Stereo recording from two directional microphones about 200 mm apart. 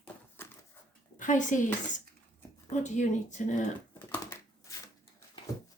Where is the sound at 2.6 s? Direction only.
35° left (ahead or behind).